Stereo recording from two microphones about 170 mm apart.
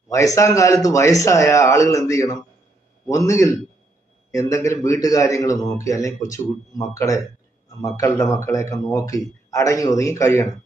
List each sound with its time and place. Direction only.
0.1 s a man's voice: 20° left (ahead or behind)